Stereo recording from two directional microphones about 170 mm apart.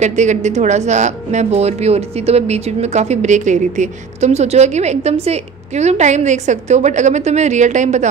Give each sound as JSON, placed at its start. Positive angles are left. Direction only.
{"t": 0.0, "sound": "a woman's voice", "side_deg": -45}